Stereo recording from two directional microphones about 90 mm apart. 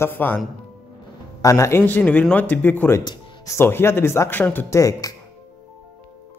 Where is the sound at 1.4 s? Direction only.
35° left (ahead or behind).